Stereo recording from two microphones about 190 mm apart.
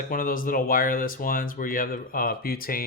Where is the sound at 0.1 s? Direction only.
45° left (ahead or behind).